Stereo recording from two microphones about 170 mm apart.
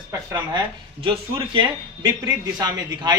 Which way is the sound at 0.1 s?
20° right (ahead or behind).